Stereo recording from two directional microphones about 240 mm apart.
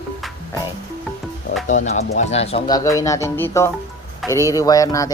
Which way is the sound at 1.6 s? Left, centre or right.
Left.